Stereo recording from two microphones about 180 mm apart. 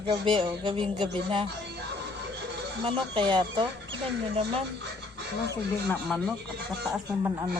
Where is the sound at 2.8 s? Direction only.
25° right (ahead or behind).